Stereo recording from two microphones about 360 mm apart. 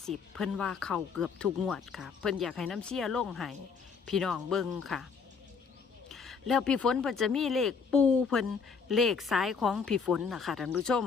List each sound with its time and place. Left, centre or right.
0.0 s speech: centre
6.1 s speech: centre